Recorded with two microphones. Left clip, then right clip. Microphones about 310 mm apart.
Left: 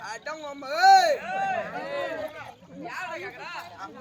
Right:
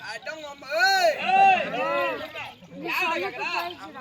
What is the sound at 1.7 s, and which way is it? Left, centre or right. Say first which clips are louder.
Run: right 7 dB; centre.